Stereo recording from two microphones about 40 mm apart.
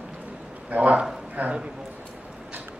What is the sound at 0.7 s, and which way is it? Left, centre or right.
Speech, right.